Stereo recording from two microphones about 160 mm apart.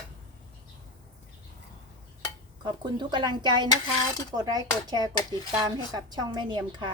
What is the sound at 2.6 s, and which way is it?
A woman's voice, 30° right (ahead or behind).